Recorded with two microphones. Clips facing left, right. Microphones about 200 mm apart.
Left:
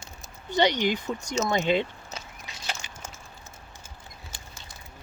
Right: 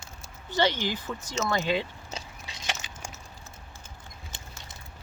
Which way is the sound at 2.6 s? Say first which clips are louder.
Right 1 dB; 10° right (ahead or behind).